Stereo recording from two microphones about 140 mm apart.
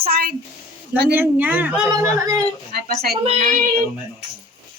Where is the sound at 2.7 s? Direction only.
90° right.